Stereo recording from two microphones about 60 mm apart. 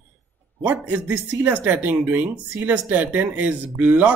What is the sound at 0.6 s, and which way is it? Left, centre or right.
Speech, right.